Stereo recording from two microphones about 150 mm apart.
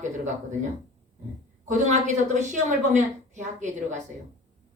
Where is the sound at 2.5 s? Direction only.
55° right (ahead or behind).